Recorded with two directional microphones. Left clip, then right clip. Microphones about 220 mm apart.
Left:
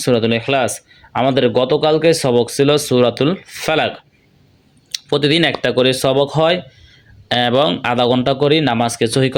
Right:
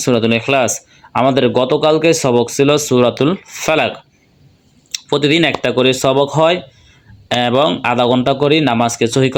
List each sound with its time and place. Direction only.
0.0 s speech: 5° right (ahead or behind)